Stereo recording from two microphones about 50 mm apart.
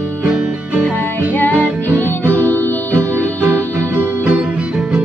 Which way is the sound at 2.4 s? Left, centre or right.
Left.